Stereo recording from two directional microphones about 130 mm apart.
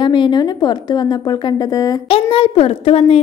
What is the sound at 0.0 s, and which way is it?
Speech, 35° left (ahead or behind).